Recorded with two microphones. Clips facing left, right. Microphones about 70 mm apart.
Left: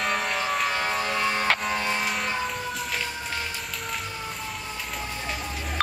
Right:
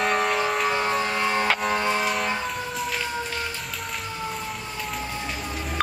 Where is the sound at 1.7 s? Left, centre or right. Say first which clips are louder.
Right 3 dB; centre.